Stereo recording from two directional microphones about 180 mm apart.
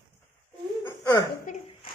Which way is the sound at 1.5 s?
50° left (ahead or behind).